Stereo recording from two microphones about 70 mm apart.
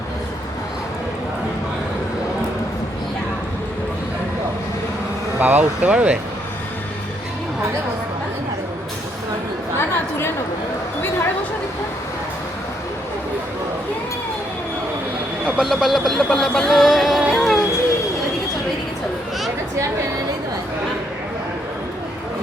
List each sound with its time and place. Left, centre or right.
5.4 s speech: right
9.7 s chatter: left
15.4 s speech: centre
17.3 s a sound: centre